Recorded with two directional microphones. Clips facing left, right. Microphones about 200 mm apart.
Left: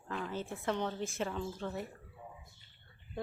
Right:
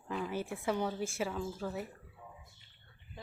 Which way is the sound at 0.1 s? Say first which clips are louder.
Right 2 dB; 10° right (ahead or behind).